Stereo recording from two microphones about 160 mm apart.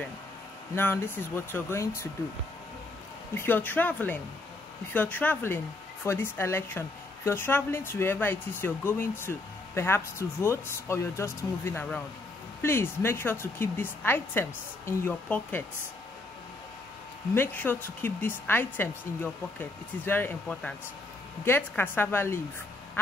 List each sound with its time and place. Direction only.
0.7 s speech: 15° left (ahead or behind)
3.3 s speech: 10° left (ahead or behind)
17.3 s speech: 15° left (ahead or behind)